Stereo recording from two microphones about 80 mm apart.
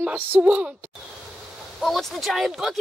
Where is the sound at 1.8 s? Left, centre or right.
Centre.